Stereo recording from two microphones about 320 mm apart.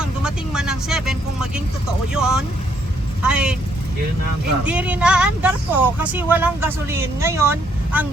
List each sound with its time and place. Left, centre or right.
0.0 s speech: centre
4.6 s speech: centre